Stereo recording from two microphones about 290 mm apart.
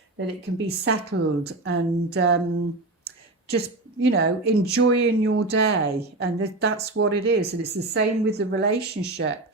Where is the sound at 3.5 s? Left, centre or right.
Right.